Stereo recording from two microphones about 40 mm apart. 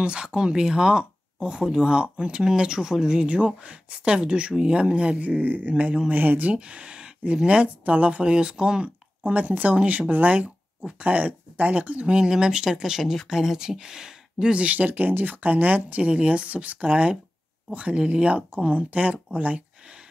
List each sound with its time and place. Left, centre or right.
0.0 s speech: right
3.3 s speech: right
6.1 s speech: right
6.5 s speech: right
7.8 s speech: right
8.2 s speech: right
9.2 s speech: right
12.1 s speech: centre
14.5 s speech: right
14.9 s speech: right